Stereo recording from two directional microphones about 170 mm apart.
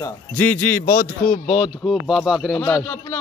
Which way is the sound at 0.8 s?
55° left (ahead or behind).